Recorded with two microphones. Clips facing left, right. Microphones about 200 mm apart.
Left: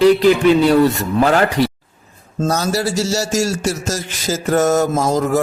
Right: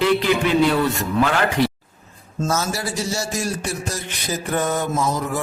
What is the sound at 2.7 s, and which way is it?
A man's voice, 75° left (ahead or behind).